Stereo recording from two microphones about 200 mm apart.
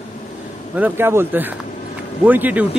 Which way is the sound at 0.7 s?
10° right (ahead or behind).